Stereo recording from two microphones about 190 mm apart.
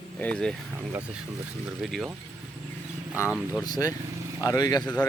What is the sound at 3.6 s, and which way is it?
Speech, 20° left (ahead or behind).